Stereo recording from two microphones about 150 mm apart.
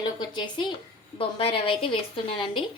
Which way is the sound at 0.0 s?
30° left (ahead or behind).